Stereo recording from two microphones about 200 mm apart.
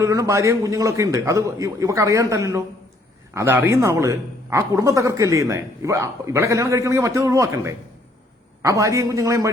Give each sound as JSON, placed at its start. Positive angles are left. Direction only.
{"t": 0.0, "sound": "a man's voice", "side_deg": -15}